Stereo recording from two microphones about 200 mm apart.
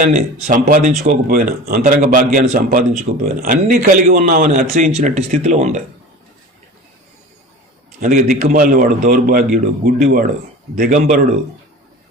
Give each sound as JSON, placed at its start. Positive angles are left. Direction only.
{"t": 0.0, "sound": "speech", "side_deg": -35}
{"t": 8.4, "sound": "speech", "side_deg": -40}